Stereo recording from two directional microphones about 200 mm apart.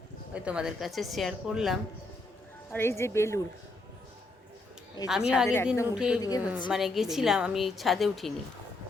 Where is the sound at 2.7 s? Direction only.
10° left (ahead or behind).